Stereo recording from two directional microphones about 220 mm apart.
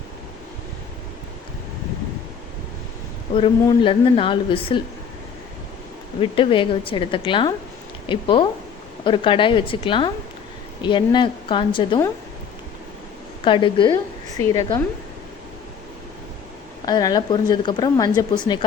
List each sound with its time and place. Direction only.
3.3 s a woman's voice: 25° left (ahead or behind)
6.1 s a woman's voice: 25° left (ahead or behind)
13.4 s a woman's voice: 20° left (ahead or behind)
16.8 s a woman's voice: 20° left (ahead or behind)